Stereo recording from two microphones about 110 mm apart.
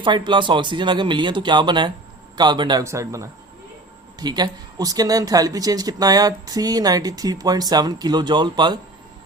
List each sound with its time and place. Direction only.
0.0 s speech: 45° right (ahead or behind)
2.8 s speech: 30° right (ahead or behind)
4.2 s speech: 40° right (ahead or behind)